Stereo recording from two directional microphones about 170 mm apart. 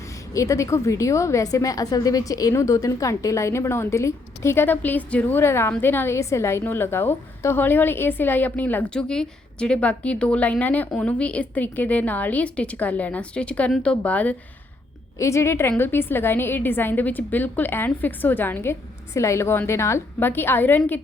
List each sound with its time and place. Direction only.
0.3 s a woman's voice: 20° left (ahead or behind)